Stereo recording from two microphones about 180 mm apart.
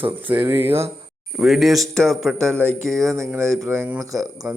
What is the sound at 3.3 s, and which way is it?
Speech, 15° right (ahead or behind).